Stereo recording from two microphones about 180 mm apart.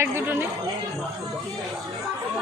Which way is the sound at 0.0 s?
10° right (ahead or behind).